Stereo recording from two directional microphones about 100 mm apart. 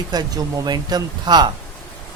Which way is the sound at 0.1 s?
40° right (ahead or behind).